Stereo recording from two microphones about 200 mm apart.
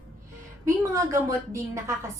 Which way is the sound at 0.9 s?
15° right (ahead or behind).